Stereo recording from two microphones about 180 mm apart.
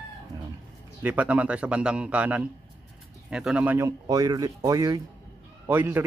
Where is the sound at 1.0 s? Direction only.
10° right (ahead or behind).